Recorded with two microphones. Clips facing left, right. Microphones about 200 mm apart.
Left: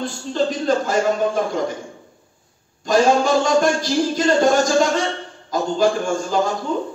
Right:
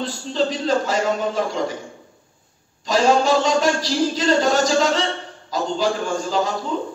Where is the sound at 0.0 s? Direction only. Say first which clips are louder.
Left 1 dB; 50° left (ahead or behind).